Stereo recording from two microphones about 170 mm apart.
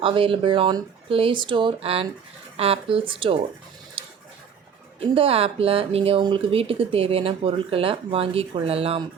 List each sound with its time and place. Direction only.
0.0 s speech: 30° right (ahead or behind)
4.9 s speech: 35° right (ahead or behind)